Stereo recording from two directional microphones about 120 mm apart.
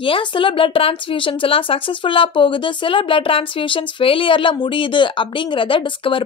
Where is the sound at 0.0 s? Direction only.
45° left (ahead or behind).